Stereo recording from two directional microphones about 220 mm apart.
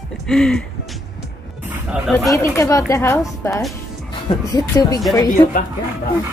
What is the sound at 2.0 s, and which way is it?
Speech, centre (ahead or behind).